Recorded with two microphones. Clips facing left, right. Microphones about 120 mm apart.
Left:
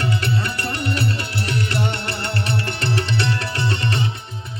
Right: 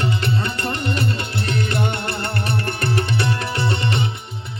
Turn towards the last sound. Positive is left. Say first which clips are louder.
# right 1 dB
turn(degrees=-20)  # may be behind; listen again after turning